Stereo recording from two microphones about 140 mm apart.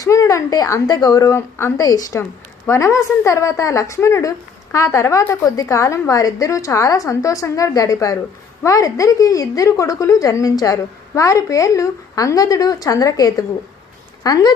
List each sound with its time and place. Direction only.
0.0 s a woman's voice: 25° left (ahead or behind)